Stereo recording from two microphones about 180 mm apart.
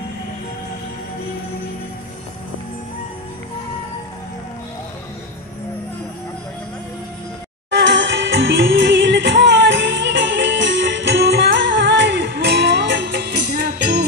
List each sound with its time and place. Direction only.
7.7 s music: 80° right; by 14.0 s 65° right (ahead or behind)